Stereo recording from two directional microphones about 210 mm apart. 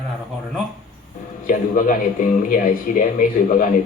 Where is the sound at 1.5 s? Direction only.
40° left (ahead or behind).